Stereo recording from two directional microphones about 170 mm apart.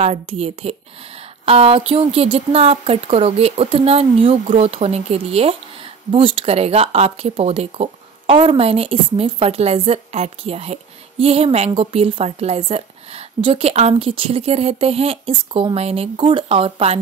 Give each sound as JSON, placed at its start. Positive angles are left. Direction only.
{"t": 0.0, "sound": "speech", "side_deg": -40}